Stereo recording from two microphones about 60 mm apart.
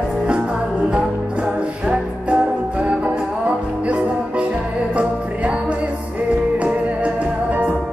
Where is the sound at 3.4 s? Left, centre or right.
Centre.